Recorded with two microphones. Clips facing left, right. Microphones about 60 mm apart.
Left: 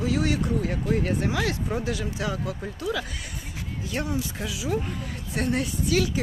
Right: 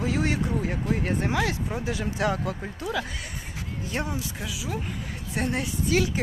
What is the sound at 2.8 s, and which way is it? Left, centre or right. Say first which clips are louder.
Speech: left 2 dB; right.